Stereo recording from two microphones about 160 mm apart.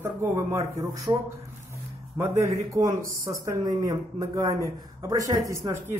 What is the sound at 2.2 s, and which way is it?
A man's voice, 20° right (ahead or behind).